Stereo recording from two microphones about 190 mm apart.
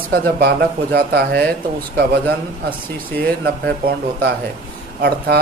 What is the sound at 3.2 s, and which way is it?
Speech, 55° right (ahead or behind).